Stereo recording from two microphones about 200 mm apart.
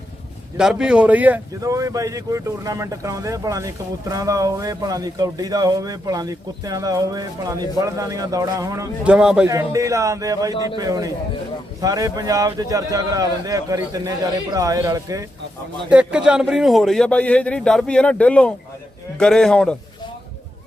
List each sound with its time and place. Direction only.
0.5 s speech: 5° right (ahead or behind)
9.0 s a man's voice: 5° right (ahead or behind)
9.5 s speech: 15° right (ahead or behind)
15.9 s a man's voice: 5° right (ahead or behind)